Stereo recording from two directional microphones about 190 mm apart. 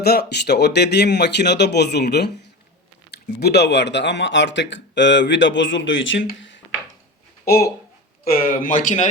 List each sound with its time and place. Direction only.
0.0 s speech: 55° left (ahead or behind); by 6.2 s 80° left
7.4 s speech: 55° left (ahead or behind)